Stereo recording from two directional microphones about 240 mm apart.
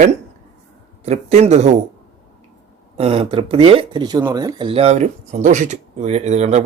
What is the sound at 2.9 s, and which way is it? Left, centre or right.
Speech, right.